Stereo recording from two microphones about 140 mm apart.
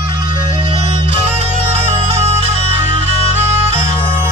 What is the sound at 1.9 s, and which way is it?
Music, 50° right (ahead or behind).